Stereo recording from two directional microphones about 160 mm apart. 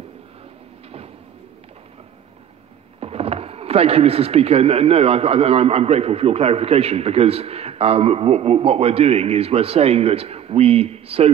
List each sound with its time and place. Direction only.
3.0 s speech: 40° right (ahead or behind)